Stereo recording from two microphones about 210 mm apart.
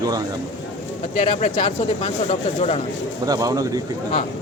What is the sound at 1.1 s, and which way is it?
Speech, 35° left (ahead or behind).